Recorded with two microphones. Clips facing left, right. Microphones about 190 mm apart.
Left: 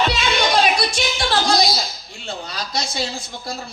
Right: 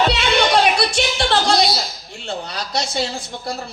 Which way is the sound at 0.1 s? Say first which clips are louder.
Right 3 dB; 65° right (ahead or behind).